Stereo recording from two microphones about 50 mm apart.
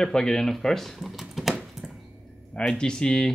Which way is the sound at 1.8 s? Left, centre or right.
Centre.